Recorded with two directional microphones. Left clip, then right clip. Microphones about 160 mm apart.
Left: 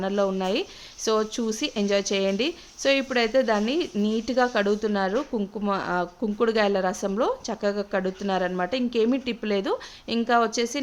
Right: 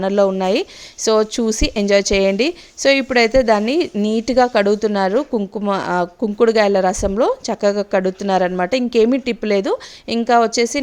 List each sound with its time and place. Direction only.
0.0 s speech: 45° right (ahead or behind)